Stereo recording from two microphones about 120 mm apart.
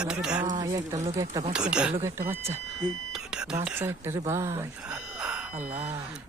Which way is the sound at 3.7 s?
20° right (ahead or behind).